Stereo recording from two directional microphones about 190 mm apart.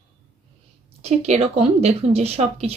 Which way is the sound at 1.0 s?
35° right (ahead or behind).